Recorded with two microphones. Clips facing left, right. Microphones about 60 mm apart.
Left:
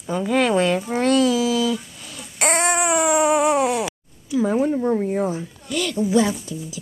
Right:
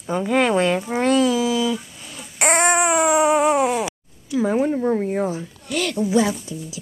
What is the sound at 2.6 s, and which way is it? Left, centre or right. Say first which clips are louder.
Baby cry: right 4 dB; right.